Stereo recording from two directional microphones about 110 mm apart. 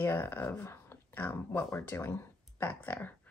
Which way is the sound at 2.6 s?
15° left (ahead or behind).